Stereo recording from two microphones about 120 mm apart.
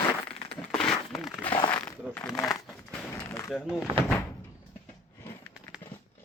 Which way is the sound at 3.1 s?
25° left (ahead or behind).